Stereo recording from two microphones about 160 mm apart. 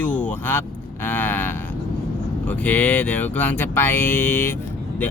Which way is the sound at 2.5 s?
10° left (ahead or behind).